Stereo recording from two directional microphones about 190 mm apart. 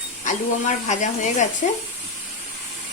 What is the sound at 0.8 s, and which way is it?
Speech, 40° left (ahead or behind).